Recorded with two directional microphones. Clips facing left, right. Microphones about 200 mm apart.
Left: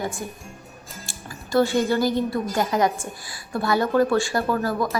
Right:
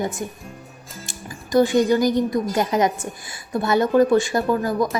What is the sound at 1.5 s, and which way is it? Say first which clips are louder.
A woman's voice: right 3 dB; 15° right (ahead or behind).